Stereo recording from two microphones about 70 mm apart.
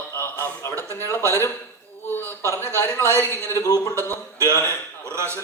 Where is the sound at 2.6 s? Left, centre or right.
Left.